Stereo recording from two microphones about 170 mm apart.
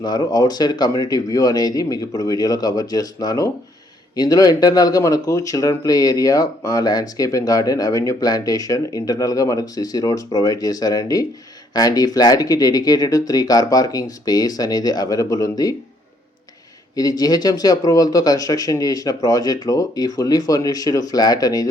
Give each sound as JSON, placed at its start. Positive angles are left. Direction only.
{"t": 0.0, "sound": "speech", "side_deg": 25}
{"t": 16.9, "sound": "speech", "side_deg": 20}